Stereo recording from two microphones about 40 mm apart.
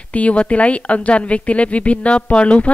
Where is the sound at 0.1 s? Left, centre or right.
Left.